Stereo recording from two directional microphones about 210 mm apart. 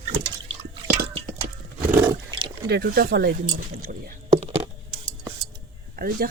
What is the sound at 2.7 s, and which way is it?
Speech, 50° right (ahead or behind).